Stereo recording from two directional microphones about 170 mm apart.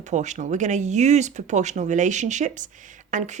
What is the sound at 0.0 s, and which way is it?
Speech, 45° right (ahead or behind).